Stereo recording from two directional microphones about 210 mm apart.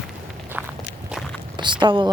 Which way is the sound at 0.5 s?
10° right (ahead or behind).